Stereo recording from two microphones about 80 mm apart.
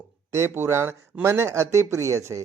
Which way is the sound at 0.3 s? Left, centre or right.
Right.